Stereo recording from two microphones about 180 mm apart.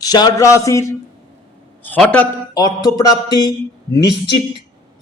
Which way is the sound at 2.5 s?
20° left (ahead or behind).